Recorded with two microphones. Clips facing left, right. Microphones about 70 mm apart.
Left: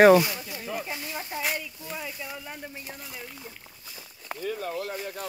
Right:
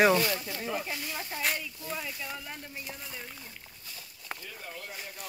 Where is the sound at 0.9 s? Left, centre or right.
Centre.